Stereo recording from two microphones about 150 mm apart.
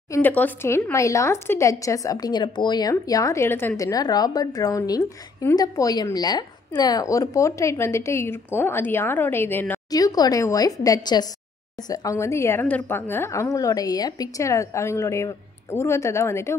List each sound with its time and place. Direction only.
0.1 s a woman's voice: 10° left (ahead or behind)
9.8 s speech: 25° left (ahead or behind)